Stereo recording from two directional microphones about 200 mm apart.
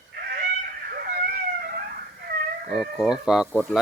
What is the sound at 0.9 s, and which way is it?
Cat, 50° right (ahead or behind).